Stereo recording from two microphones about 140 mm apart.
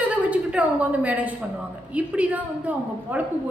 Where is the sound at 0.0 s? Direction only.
10° right (ahead or behind).